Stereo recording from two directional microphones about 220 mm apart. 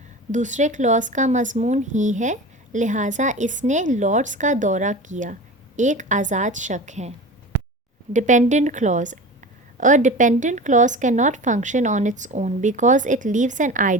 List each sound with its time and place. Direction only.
0.3 s speech: 35° right (ahead or behind)
8.1 s speech: 35° right (ahead or behind)